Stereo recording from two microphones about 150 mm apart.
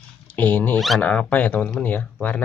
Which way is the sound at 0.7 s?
Centre (ahead or behind).